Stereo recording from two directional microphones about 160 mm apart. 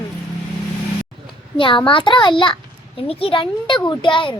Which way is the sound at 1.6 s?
30° left (ahead or behind).